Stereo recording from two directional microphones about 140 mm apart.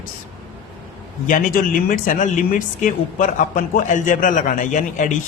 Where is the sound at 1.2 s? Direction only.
75° left (ahead or behind).